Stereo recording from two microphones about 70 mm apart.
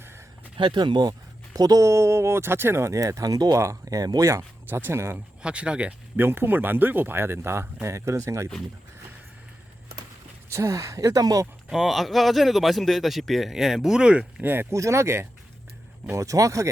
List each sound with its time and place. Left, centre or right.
0.7 s speech: right
1.5 s speech: right
1.9 s speech: right
3.6 s speech: right
4.3 s speech: right
5.4 s speech: centre
6.1 s speech: right
10.5 s speech: right
11.7 s speech: centre
14.4 s speech: right
14.7 s speech: right